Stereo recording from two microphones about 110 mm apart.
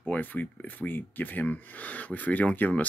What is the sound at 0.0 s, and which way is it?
Speech, 15° left (ahead or behind).